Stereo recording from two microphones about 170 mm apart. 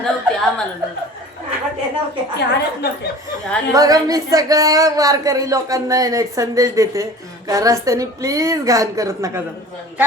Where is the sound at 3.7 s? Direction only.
20° right (ahead or behind).